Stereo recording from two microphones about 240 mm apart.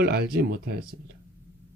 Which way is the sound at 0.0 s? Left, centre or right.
Right.